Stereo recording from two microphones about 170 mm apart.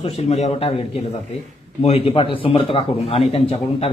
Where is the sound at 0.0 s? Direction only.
40° left (ahead or behind).